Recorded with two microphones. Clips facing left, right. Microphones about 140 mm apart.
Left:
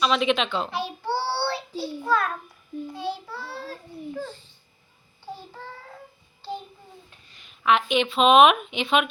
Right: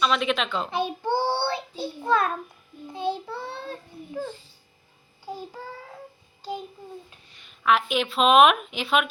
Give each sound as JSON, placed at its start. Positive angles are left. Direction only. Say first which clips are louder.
{"t": 0.0, "sound": "speech", "louder": "left 2 dB", "side_deg": 0}
{"t": 0.7, "sound": "child singing", "louder": "right 3 dB", "side_deg": -20}
{"t": 5.2, "sound": "child singing", "louder": "right 3 dB", "side_deg": -10}
{"t": 6.4, "sound": "a sound", "louder": "right 1 dB", "side_deg": -10}
{"t": 7.6, "sound": "speech", "louder": "left 1 dB", "side_deg": 0}